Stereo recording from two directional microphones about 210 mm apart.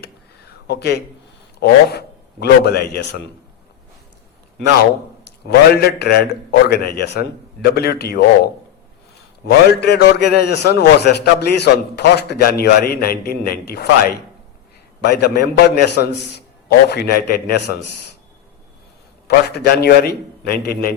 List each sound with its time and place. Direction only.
0.7 s a man's voice: 50° left (ahead or behind)
5.5 s a man's voice: 50° left (ahead or behind)
9.5 s a man's voice: 50° left (ahead or behind)
19.3 s a man's voice: 50° left (ahead or behind)